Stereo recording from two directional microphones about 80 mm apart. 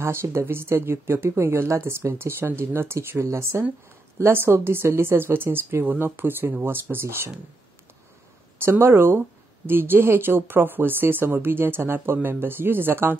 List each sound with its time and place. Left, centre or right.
0.0 s speech: right
8.5 s speech: right